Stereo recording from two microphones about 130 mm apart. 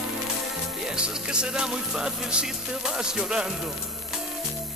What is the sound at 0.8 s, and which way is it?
Music, 5° right (ahead or behind).